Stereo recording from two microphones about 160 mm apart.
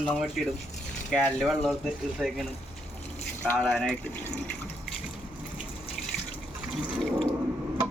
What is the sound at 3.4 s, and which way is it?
Water, 10° left (ahead or behind).